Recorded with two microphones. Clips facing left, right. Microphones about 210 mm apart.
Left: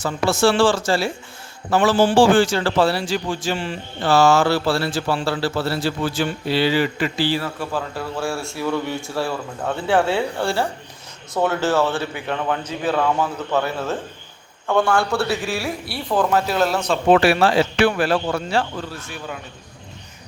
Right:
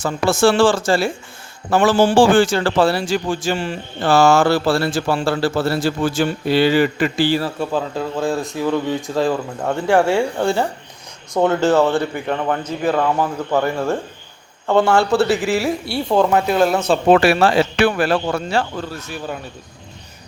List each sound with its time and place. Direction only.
0.0 s a man's voice: 50° right (ahead or behind)
7.6 s speech: 20° right (ahead or behind)
14.7 s a man's voice: 25° right (ahead or behind)
16.3 s speech: centre (ahead or behind)
16.7 s a man's voice: 25° right (ahead or behind)
17.1 s a man's voice: 45° right (ahead or behind)